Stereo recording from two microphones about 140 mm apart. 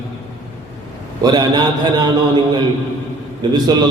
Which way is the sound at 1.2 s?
30° right (ahead or behind).